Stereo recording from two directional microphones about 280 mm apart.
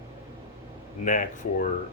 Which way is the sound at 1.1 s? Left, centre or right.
Left.